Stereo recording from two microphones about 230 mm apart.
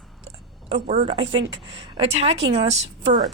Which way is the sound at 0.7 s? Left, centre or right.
Right.